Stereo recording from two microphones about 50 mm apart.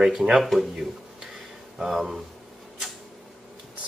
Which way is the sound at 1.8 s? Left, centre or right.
Centre.